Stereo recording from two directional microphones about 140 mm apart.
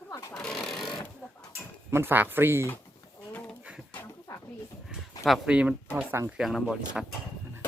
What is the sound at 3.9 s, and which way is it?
Bird, 15° left (ahead or behind).